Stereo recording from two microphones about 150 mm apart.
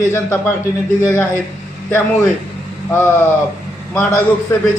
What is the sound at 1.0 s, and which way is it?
Speech, 15° left (ahead or behind).